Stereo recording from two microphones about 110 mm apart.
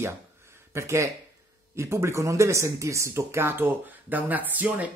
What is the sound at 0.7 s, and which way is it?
Speech, 25° right (ahead or behind).